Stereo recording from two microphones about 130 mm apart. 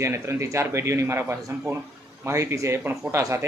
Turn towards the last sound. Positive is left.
turn(degrees=-20)  # may be behind; listen again after turning